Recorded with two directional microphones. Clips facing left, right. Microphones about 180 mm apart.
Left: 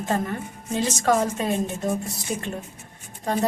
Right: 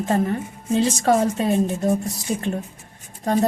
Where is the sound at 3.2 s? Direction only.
40° right (ahead or behind).